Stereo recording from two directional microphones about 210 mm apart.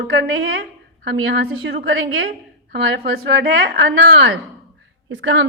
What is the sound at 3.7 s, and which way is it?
Speech, 60° right (ahead or behind).